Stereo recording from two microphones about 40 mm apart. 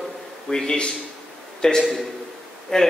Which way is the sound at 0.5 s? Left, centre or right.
Centre.